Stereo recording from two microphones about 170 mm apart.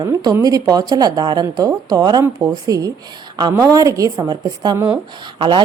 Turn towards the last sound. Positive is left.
turn(degrees=-30)  # may be behind; listen again after turning